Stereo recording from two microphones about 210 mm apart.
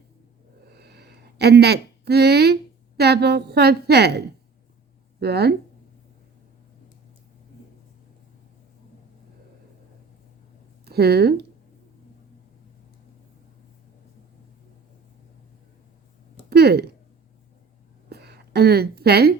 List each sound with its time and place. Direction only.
0.7 s a sound: 50° right (ahead or behind)
3.0 s a woman's voice: 50° right (ahead or behind)
5.2 s a woman's voice: 50° right (ahead or behind)
10.8 s speech: 50° right (ahead or behind)
16.5 s speech: 50° right (ahead or behind)
18.1 s a sound: 50° right (ahead or behind)